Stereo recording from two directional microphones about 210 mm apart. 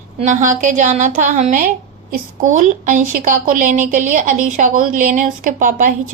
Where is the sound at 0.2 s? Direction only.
35° right (ahead or behind).